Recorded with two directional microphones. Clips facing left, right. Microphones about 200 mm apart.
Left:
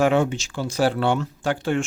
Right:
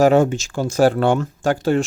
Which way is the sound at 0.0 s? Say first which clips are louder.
Right 5 dB; 40° right (ahead or behind).